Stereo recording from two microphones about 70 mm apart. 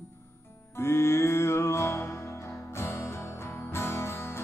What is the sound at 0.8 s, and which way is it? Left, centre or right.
Music, left.